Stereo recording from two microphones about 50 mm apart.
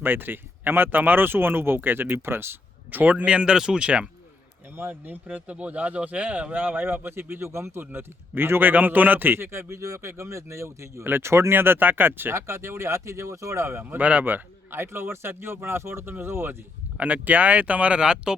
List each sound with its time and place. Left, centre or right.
0.0 s speech: right
2.9 s speech: right
3.2 s speech: right
4.8 s speech: right
8.7 s speech: right
11.0 s speech: right
13.8 s speech: right
14.7 s speech: right
17.0 s speech: right; by 18.3 s centre